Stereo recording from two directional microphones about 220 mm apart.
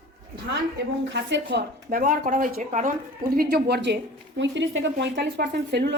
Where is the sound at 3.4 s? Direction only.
45° right (ahead or behind).